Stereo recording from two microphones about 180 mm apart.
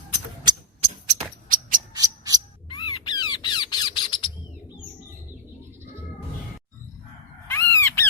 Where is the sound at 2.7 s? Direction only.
25° left (ahead or behind).